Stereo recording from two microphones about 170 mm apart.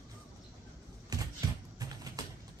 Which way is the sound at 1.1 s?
20° right (ahead or behind).